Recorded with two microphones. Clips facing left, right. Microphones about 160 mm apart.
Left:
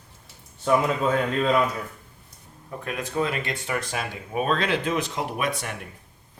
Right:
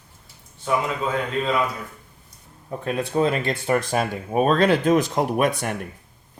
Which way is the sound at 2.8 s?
30° right (ahead or behind).